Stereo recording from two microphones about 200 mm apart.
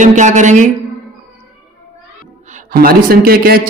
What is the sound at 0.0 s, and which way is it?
Speech, 35° right (ahead or behind).